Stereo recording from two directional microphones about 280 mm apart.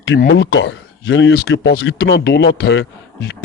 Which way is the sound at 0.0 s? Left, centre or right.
Left.